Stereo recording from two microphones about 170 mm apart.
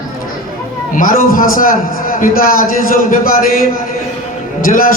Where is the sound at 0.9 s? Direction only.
55° left (ahead or behind).